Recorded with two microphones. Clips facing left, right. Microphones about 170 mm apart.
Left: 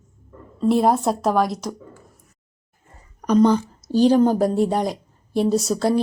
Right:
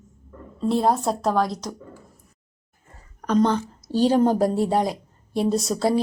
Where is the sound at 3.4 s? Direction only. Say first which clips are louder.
Left 5 dB; 10° left (ahead or behind).